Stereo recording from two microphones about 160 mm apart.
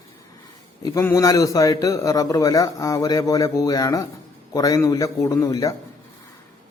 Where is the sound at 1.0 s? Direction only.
15° left (ahead or behind).